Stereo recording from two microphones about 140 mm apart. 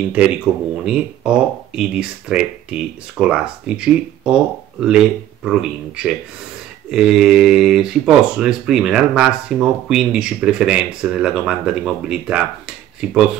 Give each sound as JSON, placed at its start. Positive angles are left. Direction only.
{"t": 0.5, "sound": "speech", "side_deg": -10}